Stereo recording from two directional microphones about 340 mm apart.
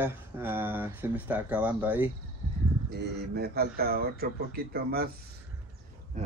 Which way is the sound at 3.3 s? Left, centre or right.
Right.